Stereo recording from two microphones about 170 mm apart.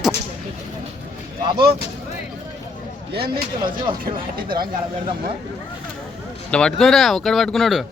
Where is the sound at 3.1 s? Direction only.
65° right (ahead or behind).